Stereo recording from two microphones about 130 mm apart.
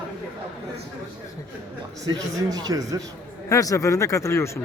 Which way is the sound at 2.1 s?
30° right (ahead or behind).